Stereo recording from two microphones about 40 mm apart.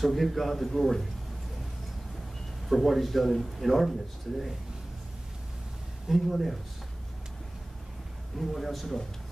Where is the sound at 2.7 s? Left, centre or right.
Centre.